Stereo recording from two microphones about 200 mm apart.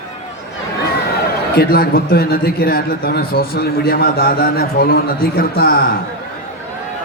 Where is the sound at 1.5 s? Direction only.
50° left (ahead or behind).